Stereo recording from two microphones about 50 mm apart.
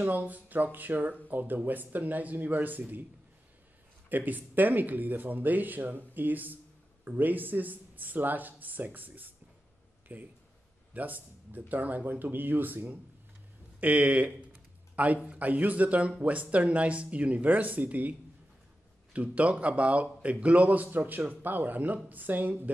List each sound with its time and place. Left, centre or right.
0.0 s speech: right
4.1 s speech: right
19.1 s speech: right